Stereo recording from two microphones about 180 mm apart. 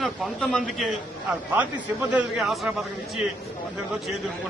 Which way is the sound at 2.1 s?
5° right (ahead or behind).